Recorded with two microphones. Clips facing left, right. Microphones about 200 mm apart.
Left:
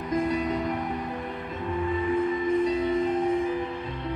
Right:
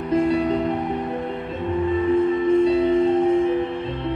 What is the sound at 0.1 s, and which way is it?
Music, 30° right (ahead or behind).